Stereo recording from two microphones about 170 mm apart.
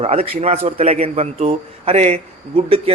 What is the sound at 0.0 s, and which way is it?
A man's voice, 35° right (ahead or behind).